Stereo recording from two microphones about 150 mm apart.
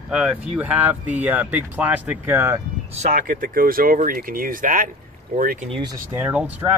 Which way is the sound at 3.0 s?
60° right (ahead or behind).